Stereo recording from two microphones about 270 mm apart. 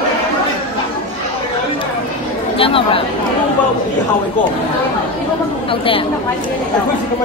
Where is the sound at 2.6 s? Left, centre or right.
Centre.